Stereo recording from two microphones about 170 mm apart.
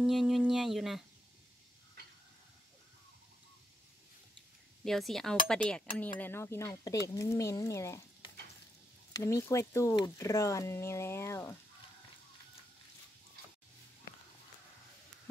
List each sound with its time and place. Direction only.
0.0 s speech: centre (ahead or behind)
4.8 s speech: centre (ahead or behind)